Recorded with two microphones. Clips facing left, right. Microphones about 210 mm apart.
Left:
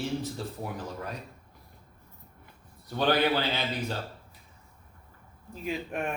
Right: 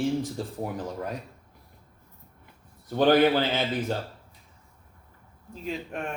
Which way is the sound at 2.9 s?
50° right (ahead or behind).